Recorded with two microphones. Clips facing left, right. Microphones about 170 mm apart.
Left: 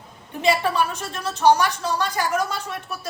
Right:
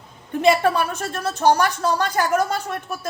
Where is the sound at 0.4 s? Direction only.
50° right (ahead or behind).